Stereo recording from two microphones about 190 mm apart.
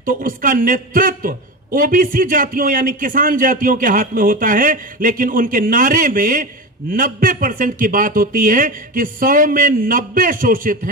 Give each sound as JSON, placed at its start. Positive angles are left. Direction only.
{"t": 0.0, "sound": "a man's voice", "side_deg": -45}